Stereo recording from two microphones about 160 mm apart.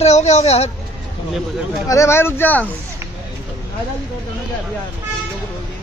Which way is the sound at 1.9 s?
15° left (ahead or behind).